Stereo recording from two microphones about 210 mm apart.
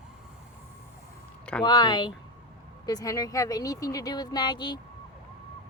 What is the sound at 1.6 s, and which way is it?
A woman's voice, 20° left (ahead or behind).